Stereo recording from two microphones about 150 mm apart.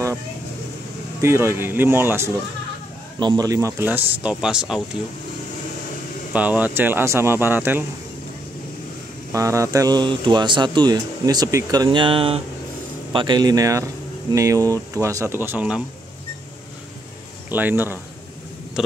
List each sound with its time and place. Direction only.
1.2 s speech: 15° right (ahead or behind)
3.2 s speech: 25° right (ahead or behind); by 4.8 s 5° right (ahead or behind)
6.3 s speech: 10° right (ahead or behind)
9.3 s speech: 20° right (ahead or behind)
17.5 s speech: 15° right (ahead or behind)
18.8 s speech: 5° right (ahead or behind)